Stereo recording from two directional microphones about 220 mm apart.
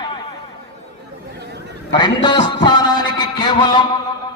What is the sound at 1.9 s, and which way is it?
A man's voice, 20° left (ahead or behind).